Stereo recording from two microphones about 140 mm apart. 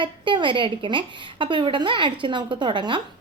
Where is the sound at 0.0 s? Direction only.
35° right (ahead or behind).